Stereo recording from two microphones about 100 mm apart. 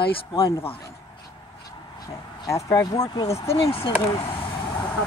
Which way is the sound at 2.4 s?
35° left (ahead or behind).